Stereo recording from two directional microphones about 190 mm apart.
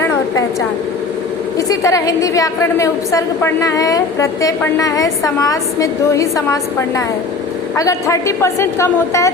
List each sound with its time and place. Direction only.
1.5 s a woman's voice: 15° left (ahead or behind)